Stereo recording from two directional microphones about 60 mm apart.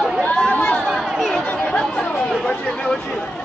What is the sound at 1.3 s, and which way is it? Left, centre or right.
Chatter, centre.